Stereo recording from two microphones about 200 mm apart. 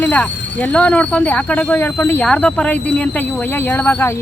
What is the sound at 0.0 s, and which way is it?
Speech, 10° left (ahead or behind).